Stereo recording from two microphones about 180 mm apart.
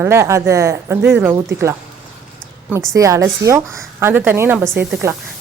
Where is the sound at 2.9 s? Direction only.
20° right (ahead or behind).